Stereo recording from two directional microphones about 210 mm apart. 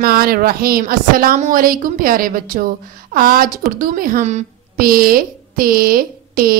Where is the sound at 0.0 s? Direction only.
45° right (ahead or behind).